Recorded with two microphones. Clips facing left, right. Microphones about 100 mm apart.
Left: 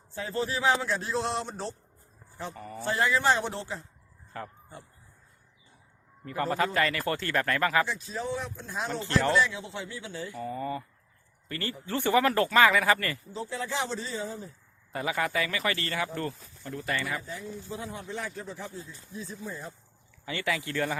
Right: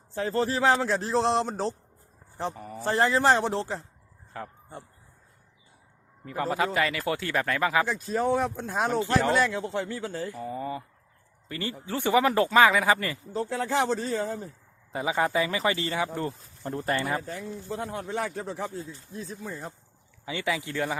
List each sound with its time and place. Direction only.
0.1 s a man's voice: 45° right (ahead or behind)
2.6 s speech: 15° right (ahead or behind)
2.8 s a man's voice: 40° right (ahead or behind)
4.3 s speech: centre (ahead or behind)
6.2 s speech: 10° right (ahead or behind)
7.9 s speech: 50° right (ahead or behind)
10.3 s speech: 10° right (ahead or behind)
13.3 s speech: 55° right (ahead or behind)
14.9 s speech: 25° right (ahead or behind)
16.6 s a man's voice: 40° right (ahead or behind)
17.2 s a man's voice: 60° right (ahead or behind)
18.1 s speech: 90° right; by 18.8 s 65° right (ahead or behind)
19.5 s speech: 45° right (ahead or behind)
20.2 s speech: 15° right (ahead or behind)